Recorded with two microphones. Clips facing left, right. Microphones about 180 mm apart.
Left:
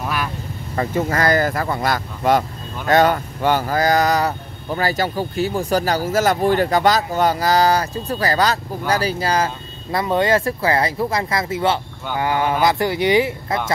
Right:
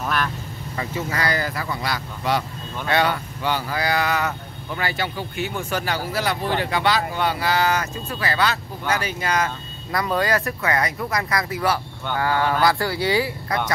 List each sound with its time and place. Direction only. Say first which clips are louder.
0.0 s vehicle: left 1 dB; 10° left (ahead or behind)
0.7 s speech: left 7 dB; 50° left (ahead or behind); by 13.6 s 20° left (ahead or behind)